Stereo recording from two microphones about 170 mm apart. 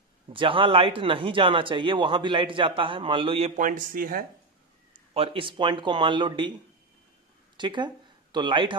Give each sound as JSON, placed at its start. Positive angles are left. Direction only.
{"t": 0.3, "sound": "speech", "side_deg": -30}
{"t": 3.5, "sound": "speech", "side_deg": -50}
{"t": 5.1, "sound": "speech", "side_deg": -30}
{"t": 7.5, "sound": "speech", "side_deg": -25}